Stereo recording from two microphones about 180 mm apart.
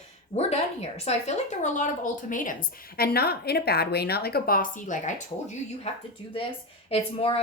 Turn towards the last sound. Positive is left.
turn(degrees=35)  # may be behind; listen again after turning